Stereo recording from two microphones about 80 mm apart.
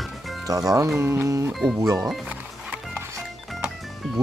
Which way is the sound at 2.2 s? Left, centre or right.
Centre.